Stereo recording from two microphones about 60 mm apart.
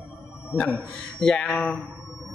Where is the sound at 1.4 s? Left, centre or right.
Centre.